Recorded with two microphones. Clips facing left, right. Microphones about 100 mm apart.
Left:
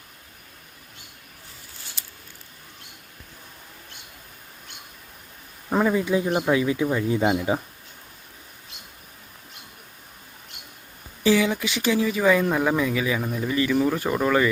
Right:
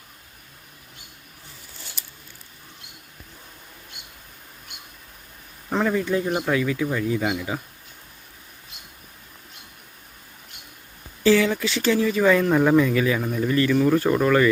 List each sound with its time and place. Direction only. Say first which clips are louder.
5.7 s speech: left 1 dB; 10° left (ahead or behind); by 7.6 s 30° left (ahead or behind)
11.2 s speech: right 2 dB; 15° left (ahead or behind)